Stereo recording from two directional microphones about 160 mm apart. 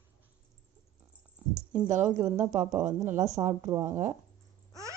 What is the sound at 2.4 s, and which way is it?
Speech, 45° right (ahead or behind).